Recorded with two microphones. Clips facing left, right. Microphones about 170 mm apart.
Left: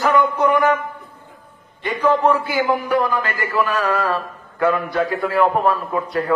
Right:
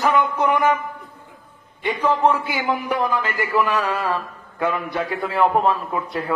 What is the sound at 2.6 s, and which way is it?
A man's voice, 20° right (ahead or behind).